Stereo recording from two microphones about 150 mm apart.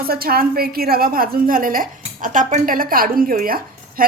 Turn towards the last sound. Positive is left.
turn(degrees=-75)  # may be behind; listen again after turning